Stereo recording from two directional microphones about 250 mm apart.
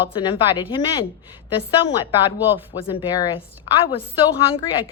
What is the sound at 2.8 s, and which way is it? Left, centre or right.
A woman's voice, centre.